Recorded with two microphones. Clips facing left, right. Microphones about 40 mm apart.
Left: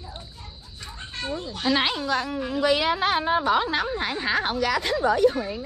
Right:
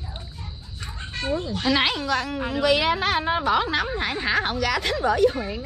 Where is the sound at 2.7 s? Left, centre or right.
Right.